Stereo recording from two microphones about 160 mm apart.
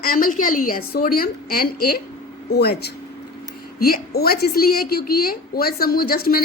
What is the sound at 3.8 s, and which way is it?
A woman's voice, 70° left (ahead or behind).